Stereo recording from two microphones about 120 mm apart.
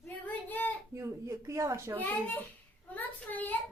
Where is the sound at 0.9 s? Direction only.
25° right (ahead or behind).